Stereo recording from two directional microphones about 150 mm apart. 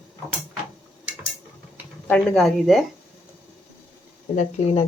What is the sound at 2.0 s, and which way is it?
Speech, 5° left (ahead or behind).